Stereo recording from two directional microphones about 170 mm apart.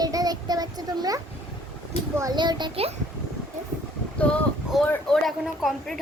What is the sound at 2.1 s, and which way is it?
Speech, 25° right (ahead or behind).